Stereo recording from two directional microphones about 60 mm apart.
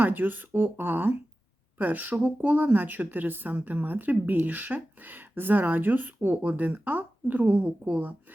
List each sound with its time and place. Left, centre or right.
0.0 s a woman's voice: right